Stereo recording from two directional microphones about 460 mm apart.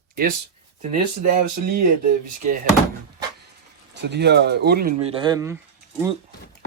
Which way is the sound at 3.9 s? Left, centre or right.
Right.